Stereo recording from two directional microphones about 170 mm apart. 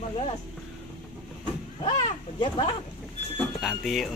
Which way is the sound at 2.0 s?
25° left (ahead or behind).